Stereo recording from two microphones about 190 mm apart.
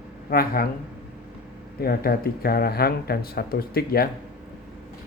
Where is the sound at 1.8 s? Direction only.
55° left (ahead or behind).